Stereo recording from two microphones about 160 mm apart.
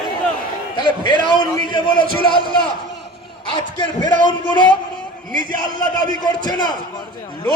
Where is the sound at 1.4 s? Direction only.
30° left (ahead or behind).